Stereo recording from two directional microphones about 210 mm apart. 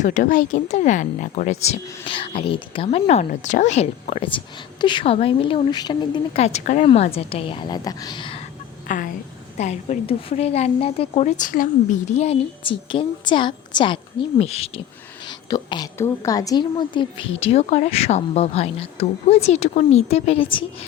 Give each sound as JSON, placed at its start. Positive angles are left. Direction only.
{"t": 0.0, "sound": "speech", "side_deg": 35}
{"t": 8.9, "sound": "a woman's voice", "side_deg": 40}